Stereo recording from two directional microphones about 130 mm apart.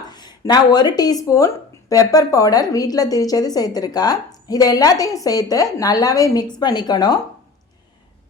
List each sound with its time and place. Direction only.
0.0 s speech: 35° left (ahead or behind)